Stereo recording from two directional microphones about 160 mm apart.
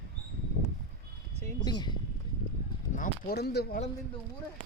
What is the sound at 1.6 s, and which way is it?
Speech, 25° left (ahead or behind).